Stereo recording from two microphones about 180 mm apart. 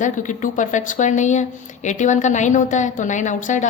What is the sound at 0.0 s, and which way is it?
A woman's voice, 45° left (ahead or behind).